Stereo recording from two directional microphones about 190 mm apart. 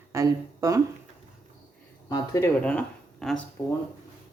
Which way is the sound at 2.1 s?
20° left (ahead or behind).